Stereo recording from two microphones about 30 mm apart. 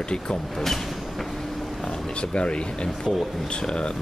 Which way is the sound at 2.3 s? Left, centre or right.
Left.